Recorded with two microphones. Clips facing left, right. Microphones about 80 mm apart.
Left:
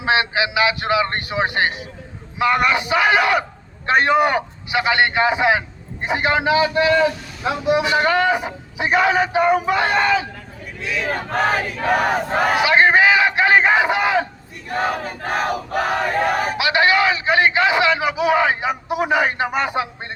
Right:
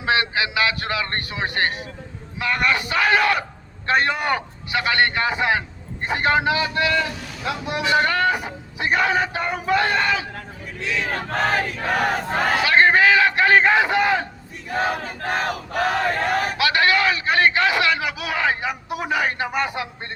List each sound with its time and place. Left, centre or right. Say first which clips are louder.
0.0 s a man's voice: left 3 dB; left
7.7 s battle cry: left 3 dB; centre
11.0 s battle cry: left 4 dB; centre
16.2 s a man's voice: left 2 dB; centre